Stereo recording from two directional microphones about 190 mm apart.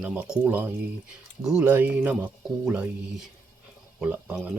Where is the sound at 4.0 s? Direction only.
5° right (ahead or behind).